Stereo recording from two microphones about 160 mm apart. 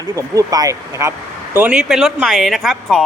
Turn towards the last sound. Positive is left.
turn(degrees=0)  # may be behind; listen again after turning